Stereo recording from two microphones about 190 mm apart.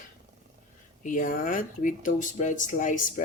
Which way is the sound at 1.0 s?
45° left (ahead or behind).